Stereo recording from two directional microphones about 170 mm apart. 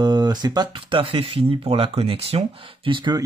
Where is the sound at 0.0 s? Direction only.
25° right (ahead or behind).